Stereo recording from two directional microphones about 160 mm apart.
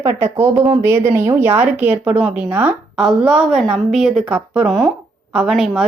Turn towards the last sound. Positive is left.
turn(degrees=0)  # may be behind; listen again after turning